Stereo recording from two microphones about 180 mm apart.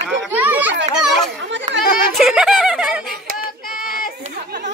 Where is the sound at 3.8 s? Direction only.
50° left (ahead or behind).